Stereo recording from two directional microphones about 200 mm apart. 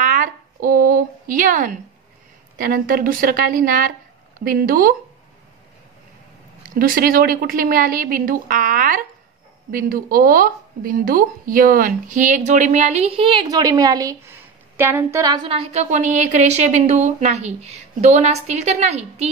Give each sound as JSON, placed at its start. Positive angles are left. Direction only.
{"t": 0.0, "sound": "a sound", "side_deg": -40}
{"t": 2.5, "sound": "a woman's voice", "side_deg": -45}
{"t": 6.8, "sound": "a woman's voice", "side_deg": -45}